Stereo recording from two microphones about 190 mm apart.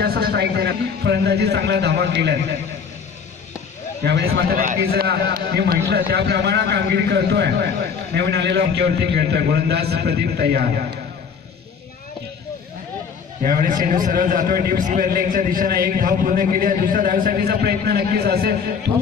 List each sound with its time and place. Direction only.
0.0 s a man's voice: 55° right (ahead or behind)
4.0 s a man's voice: 60° right (ahead or behind)
13.4 s a man's voice: 45° right (ahead or behind)